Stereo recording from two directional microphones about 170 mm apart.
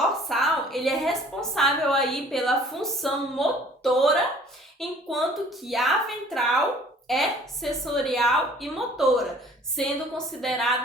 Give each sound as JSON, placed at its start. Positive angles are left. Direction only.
{"t": 0.0, "sound": "a woman's voice", "side_deg": 0}